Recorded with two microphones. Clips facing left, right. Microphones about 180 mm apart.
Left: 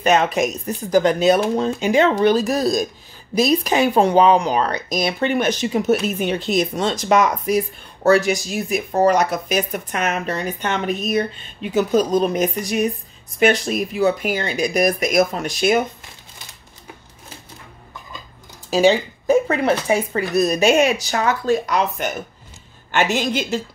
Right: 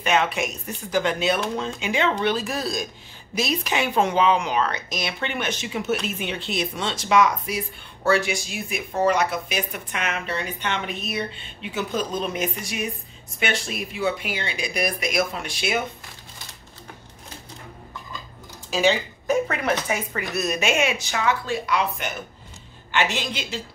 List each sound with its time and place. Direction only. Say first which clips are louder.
0.0 s speech: left 6 dB; 40° left (ahead or behind)
18.7 s speech: left 6 dB; 35° left (ahead or behind)